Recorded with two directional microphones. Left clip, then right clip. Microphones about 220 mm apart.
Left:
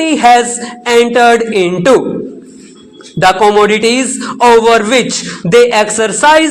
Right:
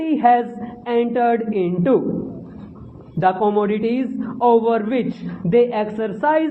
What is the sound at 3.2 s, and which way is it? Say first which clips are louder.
A man's voice: left 10 dB; 25° left (ahead or behind).